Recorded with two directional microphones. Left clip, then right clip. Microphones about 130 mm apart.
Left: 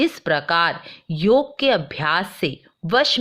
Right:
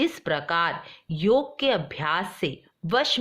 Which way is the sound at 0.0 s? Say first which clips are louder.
Left 6 dB; 25° left (ahead or behind).